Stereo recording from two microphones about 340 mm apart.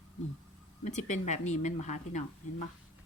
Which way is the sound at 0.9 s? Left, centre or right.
Left.